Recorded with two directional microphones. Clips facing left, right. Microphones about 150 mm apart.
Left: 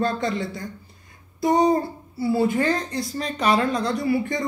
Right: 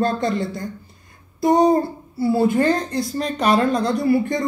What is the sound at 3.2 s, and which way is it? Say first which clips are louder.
A woman's voice: right 3 dB; 50° right (ahead or behind).